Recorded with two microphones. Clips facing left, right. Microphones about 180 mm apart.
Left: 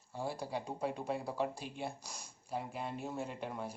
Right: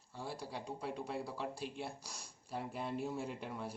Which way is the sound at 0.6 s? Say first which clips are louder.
Left 4 dB; 45° left (ahead or behind).